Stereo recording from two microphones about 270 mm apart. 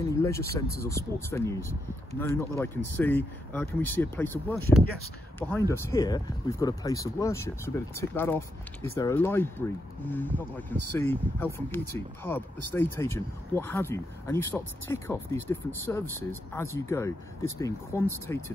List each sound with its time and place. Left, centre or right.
0.0 s speech: centre